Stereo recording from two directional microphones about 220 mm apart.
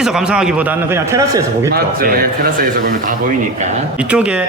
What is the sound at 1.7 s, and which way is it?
Speech, 40° right (ahead or behind).